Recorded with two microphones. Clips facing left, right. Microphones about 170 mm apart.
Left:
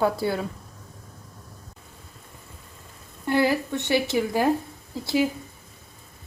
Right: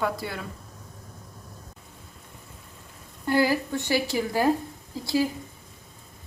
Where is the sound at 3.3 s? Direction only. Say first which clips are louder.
Left 1 dB; 20° left (ahead or behind).